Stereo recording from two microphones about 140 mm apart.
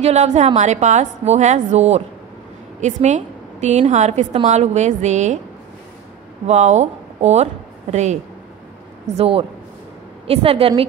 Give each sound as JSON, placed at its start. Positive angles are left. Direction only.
{"t": 0.0, "sound": "a woman's voice", "side_deg": -50}
{"t": 6.4, "sound": "a woman's voice", "side_deg": -55}